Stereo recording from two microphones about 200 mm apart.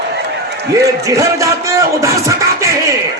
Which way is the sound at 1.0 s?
15° right (ahead or behind).